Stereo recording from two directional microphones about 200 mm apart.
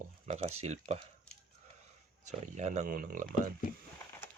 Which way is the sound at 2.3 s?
35° right (ahead or behind).